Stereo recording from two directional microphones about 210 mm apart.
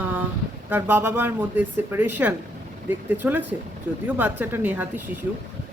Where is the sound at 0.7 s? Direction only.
10° right (ahead or behind).